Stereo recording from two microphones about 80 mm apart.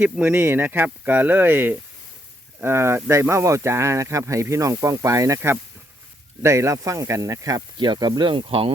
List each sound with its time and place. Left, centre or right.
0.0 s speech: right
6.4 s speech: right
7.8 s speech: right